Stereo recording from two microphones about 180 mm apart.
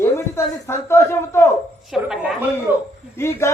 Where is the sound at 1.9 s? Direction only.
5° right (ahead or behind).